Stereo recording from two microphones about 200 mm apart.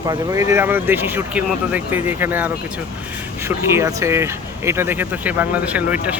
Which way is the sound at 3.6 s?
15° right (ahead or behind).